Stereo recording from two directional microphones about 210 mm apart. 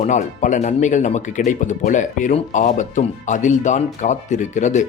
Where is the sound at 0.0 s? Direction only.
35° left (ahead or behind).